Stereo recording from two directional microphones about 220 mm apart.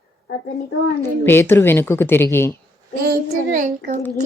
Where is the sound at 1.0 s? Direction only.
10° left (ahead or behind).